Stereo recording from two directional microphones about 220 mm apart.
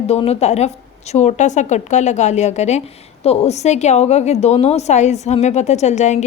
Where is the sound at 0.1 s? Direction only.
30° left (ahead or behind).